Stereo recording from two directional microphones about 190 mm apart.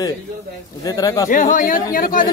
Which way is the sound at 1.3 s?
45° left (ahead or behind).